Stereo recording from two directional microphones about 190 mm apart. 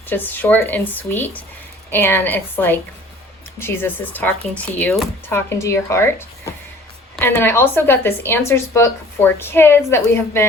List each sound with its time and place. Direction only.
0.1 s speech: 10° left (ahead or behind)